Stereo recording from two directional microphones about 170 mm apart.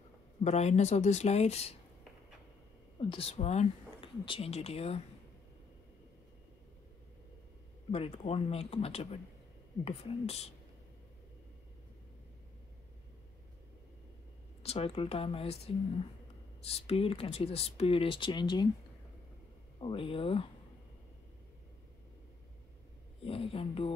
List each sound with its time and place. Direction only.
0.4 s speech: 40° left (ahead or behind)
3.0 s speech: 30° left (ahead or behind)
7.9 s speech: 35° left (ahead or behind)
14.6 s speech: 35° left (ahead or behind)
19.8 s speech: 30° left (ahead or behind)
23.2 s speech: 35° left (ahead or behind)